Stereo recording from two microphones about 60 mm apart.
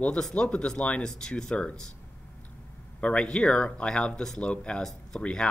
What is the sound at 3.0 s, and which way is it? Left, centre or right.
Speech, centre.